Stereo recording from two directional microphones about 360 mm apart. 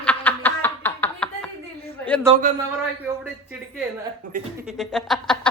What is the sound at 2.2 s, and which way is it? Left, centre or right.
Speech, right.